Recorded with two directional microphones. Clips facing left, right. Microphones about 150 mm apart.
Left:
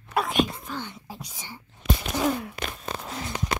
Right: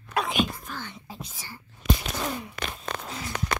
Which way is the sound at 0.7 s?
15° left (ahead or behind).